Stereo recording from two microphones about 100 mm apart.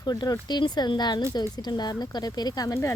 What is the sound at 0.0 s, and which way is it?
A woman's voice, 45° left (ahead or behind).